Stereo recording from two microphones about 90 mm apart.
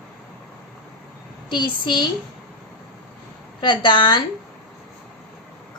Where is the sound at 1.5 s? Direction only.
60° left (ahead or behind).